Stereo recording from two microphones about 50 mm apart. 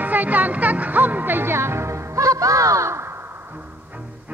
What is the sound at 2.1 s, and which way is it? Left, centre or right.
Music, right.